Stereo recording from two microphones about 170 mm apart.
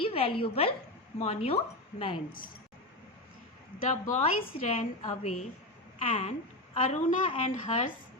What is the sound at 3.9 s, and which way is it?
A woman's voice, 45° left (ahead or behind).